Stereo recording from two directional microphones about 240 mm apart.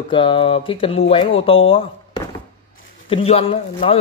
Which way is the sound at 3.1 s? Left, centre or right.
Left.